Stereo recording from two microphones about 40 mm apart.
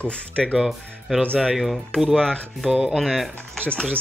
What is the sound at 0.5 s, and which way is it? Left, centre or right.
Speech, centre.